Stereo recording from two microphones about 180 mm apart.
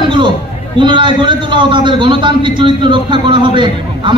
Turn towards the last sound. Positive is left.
turn(degrees=-25)  # may be behind; listen again after turning